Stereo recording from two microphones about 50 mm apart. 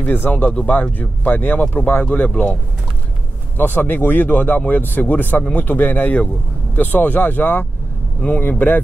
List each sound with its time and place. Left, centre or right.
0.0 s speech: left
0.3 s speech: left
0.9 s speech: left
3.5 s speech: left